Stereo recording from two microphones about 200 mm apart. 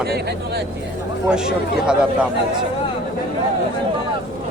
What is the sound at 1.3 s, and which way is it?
Speech, 5° right (ahead or behind).